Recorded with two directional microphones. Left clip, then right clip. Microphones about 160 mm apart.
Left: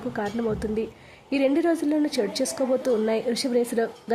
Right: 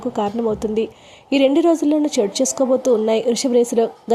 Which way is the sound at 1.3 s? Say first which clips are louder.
Right 7 dB; 25° right (ahead or behind).